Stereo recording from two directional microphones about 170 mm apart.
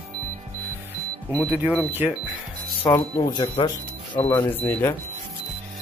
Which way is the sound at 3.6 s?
30° left (ahead or behind).